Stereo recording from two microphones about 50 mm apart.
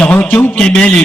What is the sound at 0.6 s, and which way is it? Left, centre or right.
Speech, centre.